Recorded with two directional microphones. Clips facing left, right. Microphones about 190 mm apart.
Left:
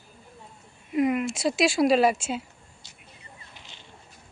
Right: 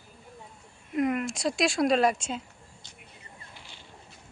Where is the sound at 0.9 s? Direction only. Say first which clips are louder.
Left 3 dB; 5° left (ahead or behind).